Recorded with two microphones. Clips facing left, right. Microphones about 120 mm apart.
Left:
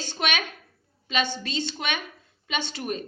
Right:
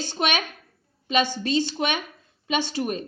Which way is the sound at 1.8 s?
30° right (ahead or behind).